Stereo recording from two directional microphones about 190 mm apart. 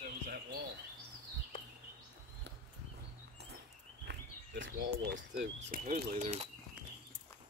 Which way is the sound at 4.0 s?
65° right (ahead or behind).